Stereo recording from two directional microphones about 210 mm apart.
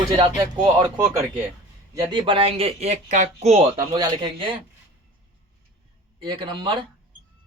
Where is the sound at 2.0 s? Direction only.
25° right (ahead or behind).